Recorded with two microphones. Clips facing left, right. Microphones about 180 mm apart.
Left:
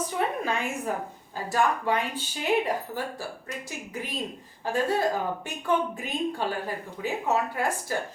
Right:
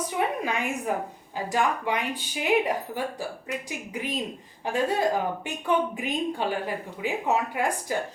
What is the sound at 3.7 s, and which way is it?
A woman's voice, 15° right (ahead or behind).